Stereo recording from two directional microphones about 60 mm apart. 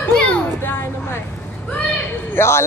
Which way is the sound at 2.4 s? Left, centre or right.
Left.